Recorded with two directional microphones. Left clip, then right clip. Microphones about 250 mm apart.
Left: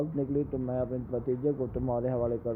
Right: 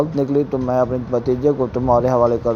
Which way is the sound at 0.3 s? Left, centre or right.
Centre.